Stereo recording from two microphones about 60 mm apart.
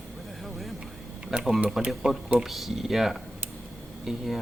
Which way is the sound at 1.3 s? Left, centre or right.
Centre.